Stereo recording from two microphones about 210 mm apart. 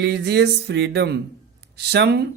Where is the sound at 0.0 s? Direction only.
50° right (ahead or behind).